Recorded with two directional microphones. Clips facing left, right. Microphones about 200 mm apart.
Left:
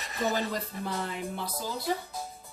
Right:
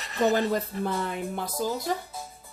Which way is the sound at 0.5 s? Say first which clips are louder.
Right 6 dB; 55° right (ahead or behind).